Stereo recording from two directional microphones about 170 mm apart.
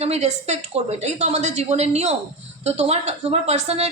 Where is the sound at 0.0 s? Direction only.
40° right (ahead or behind).